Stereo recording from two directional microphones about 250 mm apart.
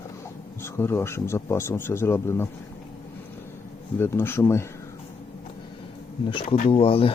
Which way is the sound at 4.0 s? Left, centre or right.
Centre.